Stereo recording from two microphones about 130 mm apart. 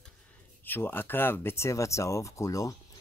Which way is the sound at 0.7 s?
15° left (ahead or behind).